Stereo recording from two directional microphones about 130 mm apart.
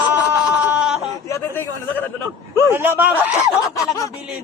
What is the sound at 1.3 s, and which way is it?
Speech, 20° left (ahead or behind).